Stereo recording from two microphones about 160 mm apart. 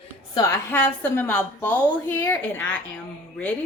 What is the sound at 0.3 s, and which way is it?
A woman's voice, 20° left (ahead or behind).